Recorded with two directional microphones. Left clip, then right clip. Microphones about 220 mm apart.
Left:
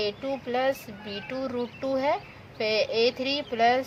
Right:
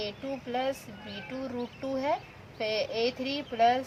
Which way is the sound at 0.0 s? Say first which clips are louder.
Left 6 dB; 35° left (ahead or behind).